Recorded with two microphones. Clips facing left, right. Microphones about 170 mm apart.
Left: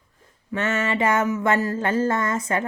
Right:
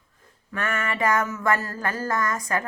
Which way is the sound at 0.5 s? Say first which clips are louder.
Left 5 dB; 25° left (ahead or behind).